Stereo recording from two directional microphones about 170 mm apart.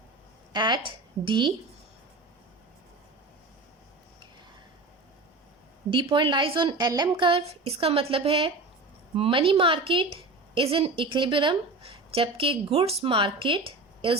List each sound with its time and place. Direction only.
0.5 s speech: 25° right (ahead or behind)
5.9 s a woman's voice: 30° right (ahead or behind)